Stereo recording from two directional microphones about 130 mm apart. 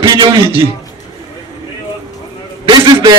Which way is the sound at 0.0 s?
35° right (ahead or behind).